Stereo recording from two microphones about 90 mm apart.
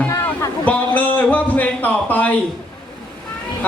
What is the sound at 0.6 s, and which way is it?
A man's voice, 20° left (ahead or behind).